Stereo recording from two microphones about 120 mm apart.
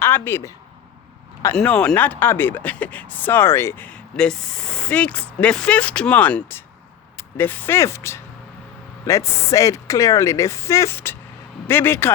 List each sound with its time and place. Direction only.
0.0 s speech: 20° left (ahead or behind)
1.5 s speech: 10° left (ahead or behind)